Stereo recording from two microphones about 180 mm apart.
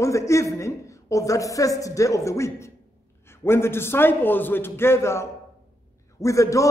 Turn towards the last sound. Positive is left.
turn(degrees=15)  # may be behind; listen again after turning